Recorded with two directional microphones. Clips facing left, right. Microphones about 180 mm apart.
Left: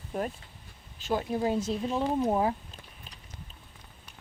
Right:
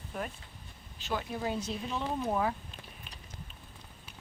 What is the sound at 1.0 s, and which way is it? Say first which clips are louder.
A woman's voice: left 6 dB; 40° left (ahead or behind).